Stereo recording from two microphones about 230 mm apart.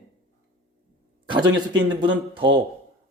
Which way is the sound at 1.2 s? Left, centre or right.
Centre.